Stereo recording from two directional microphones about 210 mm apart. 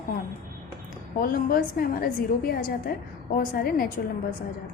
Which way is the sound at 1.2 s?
45° left (ahead or behind).